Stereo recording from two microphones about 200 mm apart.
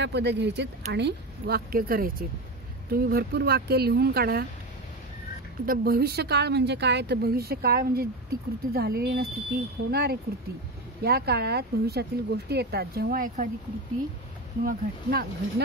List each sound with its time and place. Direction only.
0.0 s a woman's voice: 60° right (ahead or behind)
5.7 s a woman's voice: 50° right (ahead or behind)
14.6 s a woman's voice: 45° right (ahead or behind)